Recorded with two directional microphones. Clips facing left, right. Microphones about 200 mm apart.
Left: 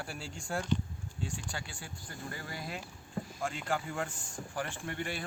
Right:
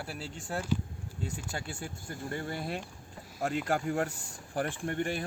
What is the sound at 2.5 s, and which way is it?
Speech, 55° right (ahead or behind).